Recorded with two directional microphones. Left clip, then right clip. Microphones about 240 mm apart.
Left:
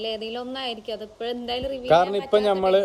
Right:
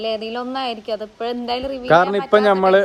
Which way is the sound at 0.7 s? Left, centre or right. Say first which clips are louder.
Right 6 dB; centre.